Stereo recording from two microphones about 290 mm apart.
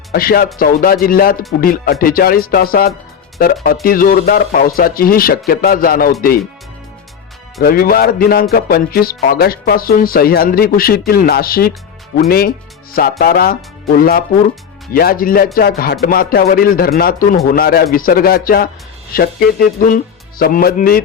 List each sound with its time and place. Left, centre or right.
0.1 s speech: left
7.6 s speech: left